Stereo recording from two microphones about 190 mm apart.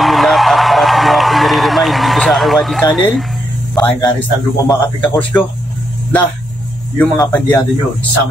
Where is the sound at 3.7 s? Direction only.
10° left (ahead or behind).